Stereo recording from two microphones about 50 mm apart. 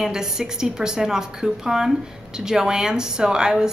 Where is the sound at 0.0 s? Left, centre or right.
Centre.